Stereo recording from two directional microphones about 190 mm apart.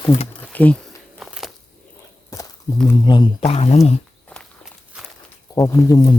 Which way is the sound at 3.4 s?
35° left (ahead or behind).